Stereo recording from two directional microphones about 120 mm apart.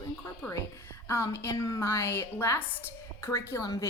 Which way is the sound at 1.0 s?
20° left (ahead or behind).